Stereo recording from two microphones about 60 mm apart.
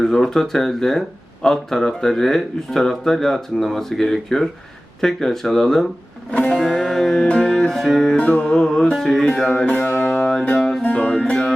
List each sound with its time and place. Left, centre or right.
0.0 s speech: centre
6.3 s music: centre
8.2 s speech: left
10.0 s music: centre